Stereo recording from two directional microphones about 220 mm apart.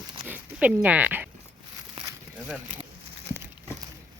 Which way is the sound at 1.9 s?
15° right (ahead or behind).